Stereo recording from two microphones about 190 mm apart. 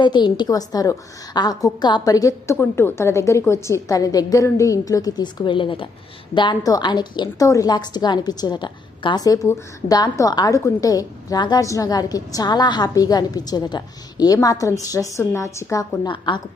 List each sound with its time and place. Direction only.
0.0 s a woman's voice: 25° left (ahead or behind)